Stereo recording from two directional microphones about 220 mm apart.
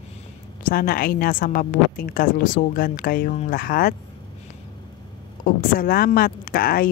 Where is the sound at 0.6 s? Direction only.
40° left (ahead or behind).